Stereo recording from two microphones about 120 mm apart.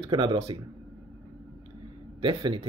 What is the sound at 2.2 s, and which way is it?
Speech, 45° right (ahead or behind).